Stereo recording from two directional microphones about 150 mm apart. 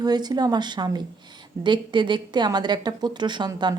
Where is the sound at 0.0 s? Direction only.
25° right (ahead or behind).